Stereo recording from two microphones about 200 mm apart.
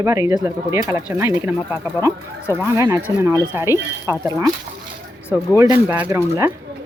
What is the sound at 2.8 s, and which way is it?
Speech, 15° right (ahead or behind).